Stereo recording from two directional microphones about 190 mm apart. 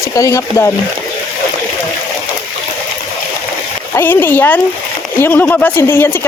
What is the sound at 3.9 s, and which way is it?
Speech, 10° left (ahead or behind).